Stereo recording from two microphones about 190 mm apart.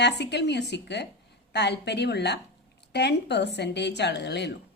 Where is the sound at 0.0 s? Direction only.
65° left (ahead or behind).